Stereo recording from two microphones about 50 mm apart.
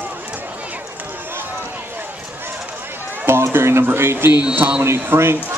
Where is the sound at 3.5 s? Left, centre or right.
Right.